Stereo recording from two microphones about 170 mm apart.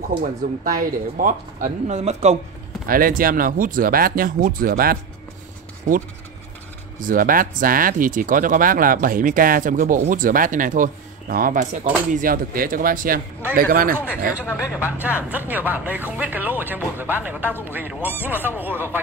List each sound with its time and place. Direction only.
0.2 s speech: 55° right (ahead or behind)
2.9 s speech: 55° right (ahead or behind)
7.0 s speech: 55° right (ahead or behind)
14.4 s speech: 15° left (ahead or behind)
15.2 s speech: 10° right (ahead or behind)